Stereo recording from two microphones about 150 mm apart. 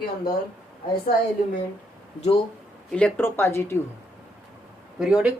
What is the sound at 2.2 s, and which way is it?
Speech, 35° left (ahead or behind).